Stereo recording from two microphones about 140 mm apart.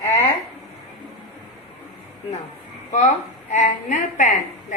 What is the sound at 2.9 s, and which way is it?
A woman's voice, 60° left (ahead or behind).